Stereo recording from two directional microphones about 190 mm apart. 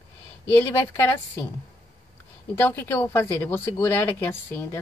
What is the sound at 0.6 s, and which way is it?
Speech, 10° left (ahead or behind).